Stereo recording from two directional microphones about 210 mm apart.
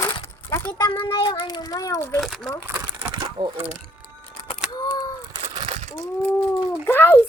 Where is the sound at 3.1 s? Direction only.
25° right (ahead or behind).